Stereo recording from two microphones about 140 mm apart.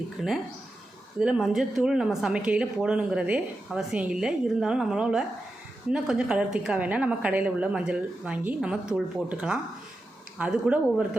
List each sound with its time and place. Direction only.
0.2 s a woman's voice: 5° right (ahead or behind)